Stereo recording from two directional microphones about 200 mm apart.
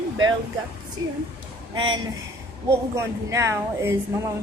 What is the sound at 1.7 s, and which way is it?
A woman's voice, 25° right (ahead or behind).